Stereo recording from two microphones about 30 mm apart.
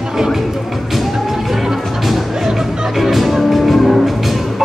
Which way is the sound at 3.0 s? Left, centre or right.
Centre.